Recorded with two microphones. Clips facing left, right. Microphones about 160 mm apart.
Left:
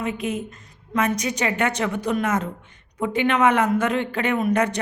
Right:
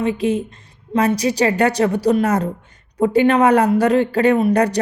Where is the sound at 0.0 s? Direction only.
30° right (ahead or behind).